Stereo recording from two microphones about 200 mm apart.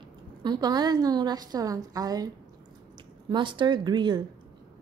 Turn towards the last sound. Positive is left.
turn(degrees=-20)  # may be behind; listen again after turning